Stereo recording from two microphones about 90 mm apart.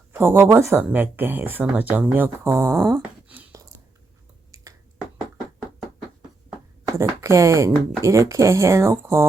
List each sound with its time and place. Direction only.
0.1 s speech: 25° right (ahead or behind)
3.2 s a sound: 15° right (ahead or behind)
4.5 s finger snapping: 40° right (ahead or behind)
6.8 s speech: 35° right (ahead or behind)